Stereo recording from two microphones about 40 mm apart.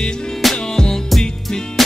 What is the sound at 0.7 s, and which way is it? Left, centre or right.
Music, centre.